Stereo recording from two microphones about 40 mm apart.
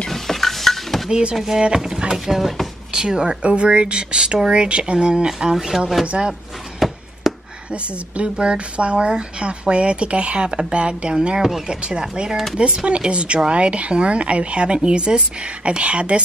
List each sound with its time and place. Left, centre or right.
0.1 s a sound: centre
1.3 s speech: centre
3.4 s speech: right; by 6.0 s centre
6.0 s speech: right
6.8 s a sound: centre
7.7 s speech: right
11.3 s speech: centre
11.7 s speech: right
12.5 s speech: right